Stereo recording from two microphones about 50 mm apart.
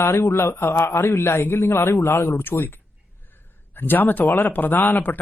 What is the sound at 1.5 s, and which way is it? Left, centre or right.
Speech, left.